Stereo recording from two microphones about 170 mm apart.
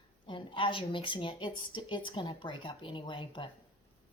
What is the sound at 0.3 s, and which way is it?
A woman's voice, 30° left (ahead or behind).